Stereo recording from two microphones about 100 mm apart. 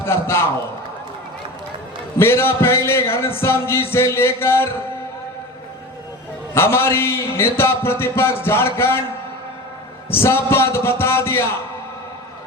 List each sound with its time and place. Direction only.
0.0 s a man's voice: 25° left (ahead or behind)
2.1 s a man's voice: 25° left (ahead or behind)
6.5 s a man's voice: 25° left (ahead or behind)
10.1 s a man's voice: 25° left (ahead or behind)